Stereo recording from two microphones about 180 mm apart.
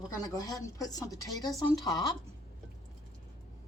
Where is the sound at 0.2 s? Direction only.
20° left (ahead or behind).